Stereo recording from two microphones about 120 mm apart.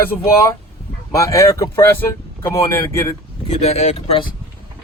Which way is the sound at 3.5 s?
60° left (ahead or behind).